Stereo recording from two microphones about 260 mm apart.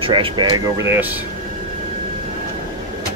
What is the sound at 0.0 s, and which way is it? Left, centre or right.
Speech, centre.